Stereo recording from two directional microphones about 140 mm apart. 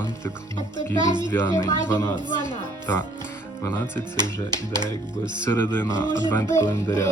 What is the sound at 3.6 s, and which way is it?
Speech, 15° left (ahead or behind).